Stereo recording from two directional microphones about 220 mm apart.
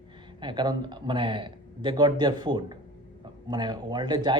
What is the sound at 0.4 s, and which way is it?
Speech, 20° right (ahead or behind).